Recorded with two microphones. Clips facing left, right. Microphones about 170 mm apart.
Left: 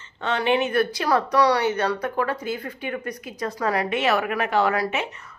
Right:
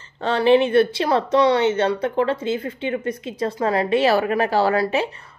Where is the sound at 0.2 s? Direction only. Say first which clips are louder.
Right 6 dB; 35° right (ahead or behind).